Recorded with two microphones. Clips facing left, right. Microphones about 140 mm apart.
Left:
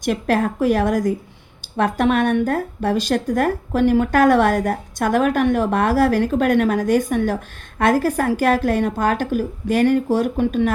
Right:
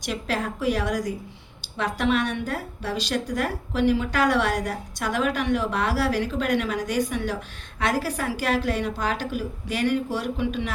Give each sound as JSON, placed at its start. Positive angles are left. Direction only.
{"t": 0.0, "sound": "speech", "side_deg": 50}